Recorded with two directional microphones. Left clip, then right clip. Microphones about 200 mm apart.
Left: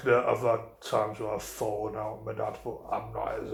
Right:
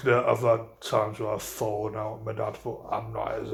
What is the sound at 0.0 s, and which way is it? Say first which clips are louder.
Speech: right 2 dB; 40° right (ahead or behind).